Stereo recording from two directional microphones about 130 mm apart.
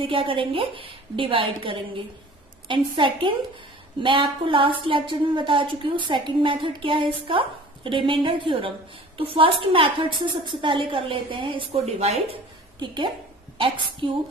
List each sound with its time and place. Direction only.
0.0 s a woman's voice: 40° right (ahead or behind)
14.0 s a woman's voice: 40° right (ahead or behind)